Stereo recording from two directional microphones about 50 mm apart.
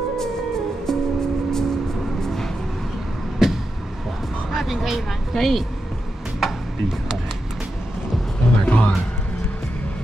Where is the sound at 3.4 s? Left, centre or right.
Centre.